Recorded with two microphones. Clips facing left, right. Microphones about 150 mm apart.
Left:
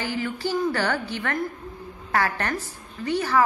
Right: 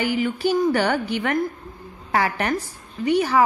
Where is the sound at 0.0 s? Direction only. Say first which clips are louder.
Right 6 dB; 15° right (ahead or behind).